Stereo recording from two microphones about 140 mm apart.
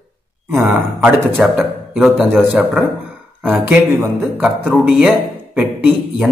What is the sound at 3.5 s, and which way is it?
A man's voice, 15° right (ahead or behind).